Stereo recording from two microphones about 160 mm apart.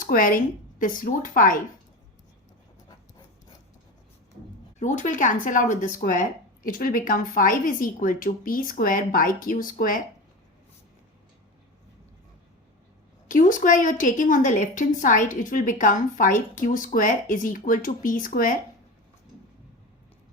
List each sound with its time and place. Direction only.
0.0 s a woman's voice: 60° left (ahead or behind)
4.8 s a woman's voice: 50° left (ahead or behind)
13.2 s a woman's voice: 55° left (ahead or behind)